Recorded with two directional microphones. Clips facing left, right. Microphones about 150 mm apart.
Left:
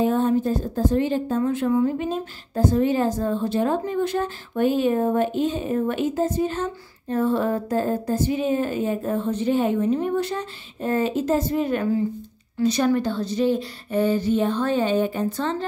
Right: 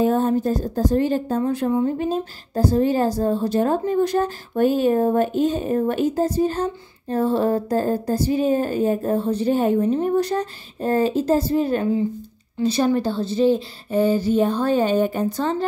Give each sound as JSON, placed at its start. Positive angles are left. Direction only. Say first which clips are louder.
{"t": 0.0, "sound": "a woman's voice", "louder": "right 1 dB", "side_deg": -40}
{"t": 1.7, "sound": "speech", "louder": "left 1 dB", "side_deg": -25}
{"t": 2.0, "sound": "a woman's voice", "louder": "right 3 dB", "side_deg": -40}